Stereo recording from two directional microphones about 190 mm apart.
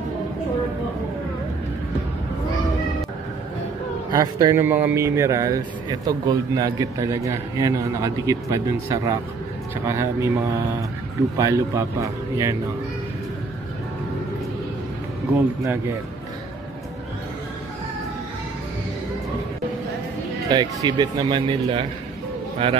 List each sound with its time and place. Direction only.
4.1 s a man's voice: 20° right (ahead or behind)
20.4 s speech: 20° right (ahead or behind)